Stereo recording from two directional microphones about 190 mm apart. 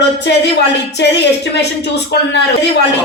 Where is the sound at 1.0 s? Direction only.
70° left (ahead or behind).